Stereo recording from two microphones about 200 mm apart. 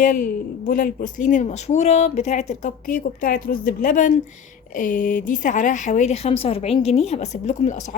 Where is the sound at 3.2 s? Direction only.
45° left (ahead or behind).